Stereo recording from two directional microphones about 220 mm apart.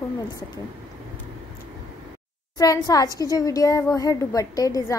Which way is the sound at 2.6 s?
15° left (ahead or behind).